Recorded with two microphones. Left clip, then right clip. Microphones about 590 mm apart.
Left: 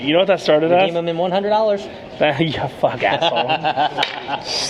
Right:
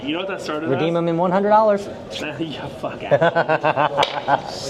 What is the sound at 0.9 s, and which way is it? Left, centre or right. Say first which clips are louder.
Speech: even; centre.